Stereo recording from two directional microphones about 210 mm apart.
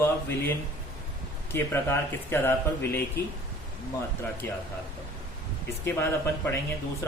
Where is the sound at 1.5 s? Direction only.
10° left (ahead or behind).